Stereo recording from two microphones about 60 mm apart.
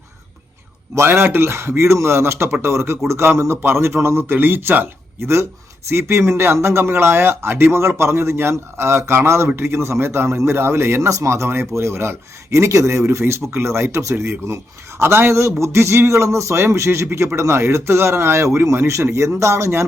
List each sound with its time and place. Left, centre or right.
0.9 s a man's voice: right
5.2 s a man's voice: right
17.1 s speech: right
17.3 s a man's voice: right